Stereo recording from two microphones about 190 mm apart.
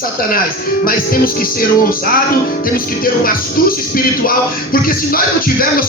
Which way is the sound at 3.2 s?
50° left (ahead or behind).